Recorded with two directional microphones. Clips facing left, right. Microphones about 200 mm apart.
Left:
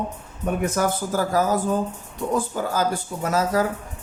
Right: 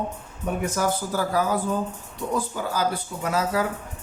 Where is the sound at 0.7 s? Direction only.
45° left (ahead or behind).